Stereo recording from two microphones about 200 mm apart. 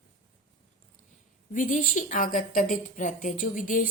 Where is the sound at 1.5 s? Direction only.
40° left (ahead or behind).